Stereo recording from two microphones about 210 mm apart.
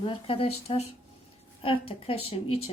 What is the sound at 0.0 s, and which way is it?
Speech, 25° left (ahead or behind).